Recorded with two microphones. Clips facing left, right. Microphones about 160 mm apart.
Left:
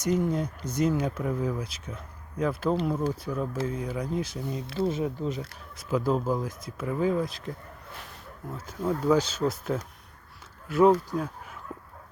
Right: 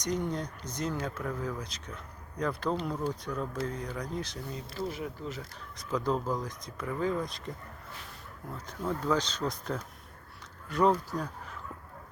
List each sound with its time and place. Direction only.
0.0 s speech: 5° left (ahead or behind)
4.6 s speech: 75° left (ahead or behind)
4.9 s speech: 25° left (ahead or behind)
5.7 s speech: 5° left (ahead or behind)
8.5 s speech: 5° left (ahead or behind)